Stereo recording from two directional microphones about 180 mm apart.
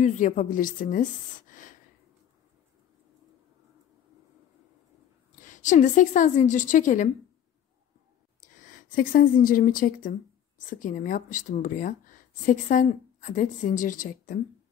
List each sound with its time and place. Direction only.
0.0 s speech: 45° left (ahead or behind)
1.5 s a sound: 50° left (ahead or behind)
5.4 s speech: 45° left (ahead or behind)
8.5 s speech: 45° left (ahead or behind)